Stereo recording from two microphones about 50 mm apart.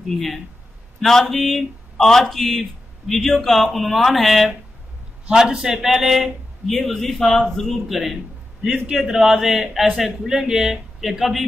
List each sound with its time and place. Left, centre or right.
0.1 s a man's voice: centre
5.5 s a man's voice: centre
5.8 s a man's voice: centre
6.7 s a man's voice: centre